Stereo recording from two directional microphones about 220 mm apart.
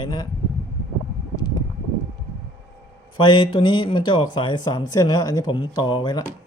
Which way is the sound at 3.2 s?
20° left (ahead or behind).